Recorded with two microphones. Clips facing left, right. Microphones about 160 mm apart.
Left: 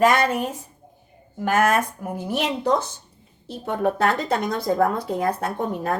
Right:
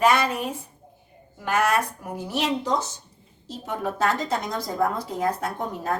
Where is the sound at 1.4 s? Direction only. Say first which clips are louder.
Left 3 dB; 50° left (ahead or behind).